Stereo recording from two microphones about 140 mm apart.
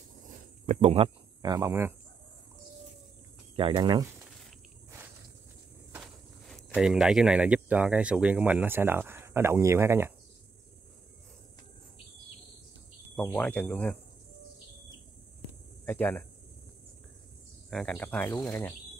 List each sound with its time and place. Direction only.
0.7 s speech: 50° right (ahead or behind)
1.4 s speech: 30° right (ahead or behind)
1.7 s speech: 15° right (ahead or behind)
3.5 s speech: 35° right (ahead or behind)
6.8 s speech: 5° right (ahead or behind)
13.1 s speech: 10° left (ahead or behind)
15.8 s speech: 10° left (ahead or behind)
17.6 s speech: 5° left (ahead or behind); by 18.8 s 20° left (ahead or behind)